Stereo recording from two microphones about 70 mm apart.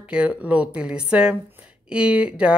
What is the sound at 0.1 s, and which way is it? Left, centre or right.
Speech, centre.